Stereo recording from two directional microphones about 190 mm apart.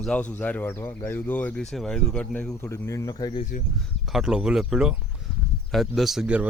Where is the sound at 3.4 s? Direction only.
40° left (ahead or behind).